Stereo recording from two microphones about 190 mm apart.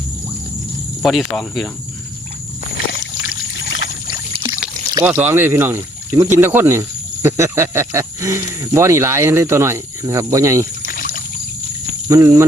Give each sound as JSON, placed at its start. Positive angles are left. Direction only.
{"t": 1.0, "sound": "speech", "side_deg": 0}
{"t": 2.9, "sound": "a sound", "side_deg": 75}
{"t": 4.4, "sound": "pour", "side_deg": -20}
{"t": 5.1, "sound": "speech", "side_deg": -10}
{"t": 10.8, "sound": "trickle", "side_deg": 45}
{"t": 12.0, "sound": "speech", "side_deg": -15}